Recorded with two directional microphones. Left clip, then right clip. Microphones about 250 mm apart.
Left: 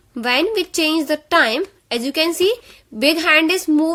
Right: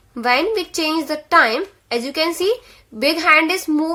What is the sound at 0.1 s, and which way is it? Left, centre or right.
A woman's voice, left.